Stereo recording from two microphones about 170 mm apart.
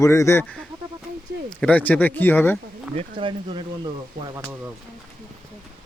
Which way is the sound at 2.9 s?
30° right (ahead or behind).